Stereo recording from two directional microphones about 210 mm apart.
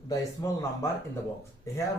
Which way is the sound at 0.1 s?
15° left (ahead or behind).